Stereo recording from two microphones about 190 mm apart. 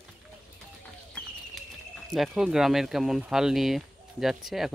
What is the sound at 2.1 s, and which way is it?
Speech, centre (ahead or behind).